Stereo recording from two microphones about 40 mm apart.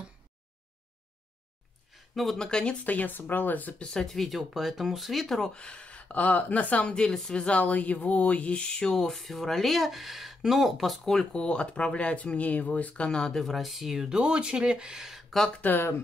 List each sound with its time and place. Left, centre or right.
2.3 s speech: centre
2.8 s speech: left
3.7 s speech: left
4.0 s speech: centre
5.5 s speech: left
7.1 s speech: centre
7.3 s speech: left
9.1 s speech: centre
11.3 s speech: left
13.0 s speech: left
13.3 s speech: centre
13.6 s speech: centre
13.9 s speech: centre
15.6 s speech: left